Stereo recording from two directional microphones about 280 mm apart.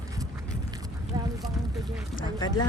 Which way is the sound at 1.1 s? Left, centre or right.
Centre.